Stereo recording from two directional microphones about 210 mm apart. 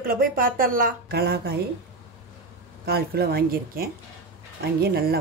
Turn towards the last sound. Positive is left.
turn(degrees=-50)  # may be behind; listen again after turning